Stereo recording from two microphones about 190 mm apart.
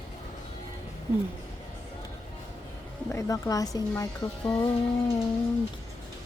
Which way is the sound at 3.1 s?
20° left (ahead or behind).